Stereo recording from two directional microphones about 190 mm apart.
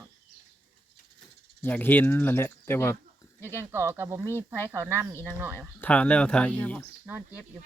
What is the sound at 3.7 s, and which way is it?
Speech, 15° right (ahead or behind).